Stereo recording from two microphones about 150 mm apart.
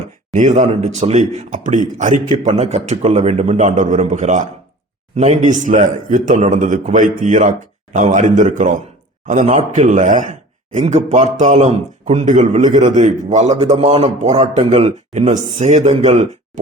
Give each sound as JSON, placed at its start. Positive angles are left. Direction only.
{"t": 0.3, "sound": "a man's voice", "side_deg": -55}